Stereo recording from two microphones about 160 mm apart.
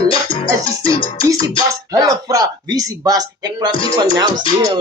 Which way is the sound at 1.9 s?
25° right (ahead or behind).